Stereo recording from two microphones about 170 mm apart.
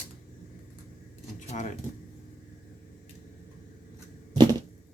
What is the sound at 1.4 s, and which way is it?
Speech, 45° left (ahead or behind).